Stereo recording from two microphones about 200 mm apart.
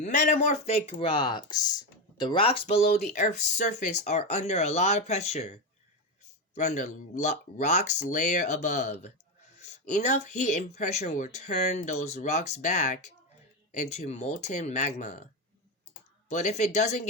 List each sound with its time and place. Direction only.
0.0 s speech: 40° left (ahead or behind)
16.3 s speech: 35° left (ahead or behind)